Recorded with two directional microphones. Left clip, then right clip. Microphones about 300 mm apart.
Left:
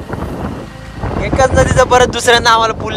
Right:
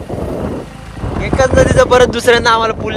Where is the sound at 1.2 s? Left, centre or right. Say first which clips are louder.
Right 1 dB; centre.